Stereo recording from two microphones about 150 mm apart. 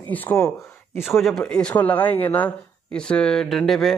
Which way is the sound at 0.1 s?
10° left (ahead or behind).